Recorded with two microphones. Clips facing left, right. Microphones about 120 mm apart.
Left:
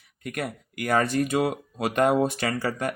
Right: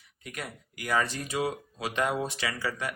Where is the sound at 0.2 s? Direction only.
55° left (ahead or behind).